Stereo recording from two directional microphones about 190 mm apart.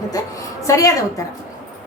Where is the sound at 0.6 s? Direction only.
15° left (ahead or behind).